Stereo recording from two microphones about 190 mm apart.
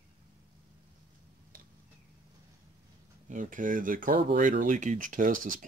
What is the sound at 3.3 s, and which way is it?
Speech, 45° right (ahead or behind).